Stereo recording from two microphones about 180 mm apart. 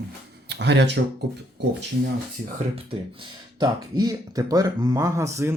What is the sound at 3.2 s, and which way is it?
Speech, 25° right (ahead or behind).